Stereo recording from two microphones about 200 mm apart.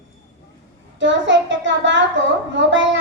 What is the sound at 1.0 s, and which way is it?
A child's voice, 65° right (ahead or behind).